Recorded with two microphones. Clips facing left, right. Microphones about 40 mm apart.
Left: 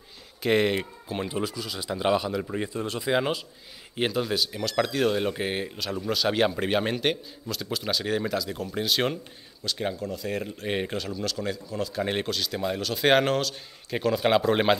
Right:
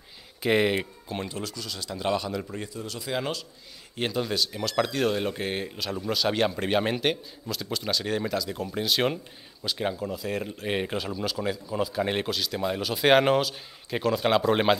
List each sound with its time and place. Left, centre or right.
0.4 s speech: centre
1.3 s speech: centre
4.1 s speech: centre